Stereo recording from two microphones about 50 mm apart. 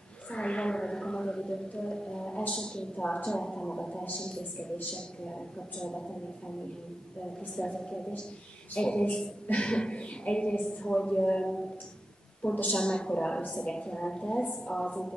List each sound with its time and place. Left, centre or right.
0.3 s a sound: left
5.8 s a woman's voice: centre
7.6 s a woman's voice: centre
12.7 s a woman's voice: centre